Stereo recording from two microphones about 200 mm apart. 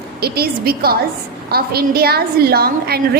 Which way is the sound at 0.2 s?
50° right (ahead or behind).